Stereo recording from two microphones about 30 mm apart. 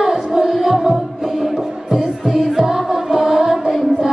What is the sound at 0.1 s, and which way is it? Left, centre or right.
Music, right.